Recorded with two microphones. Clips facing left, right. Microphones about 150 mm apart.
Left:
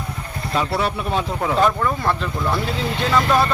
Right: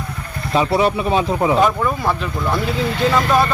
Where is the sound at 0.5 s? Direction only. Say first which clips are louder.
Right 6 dB; 20° right (ahead or behind).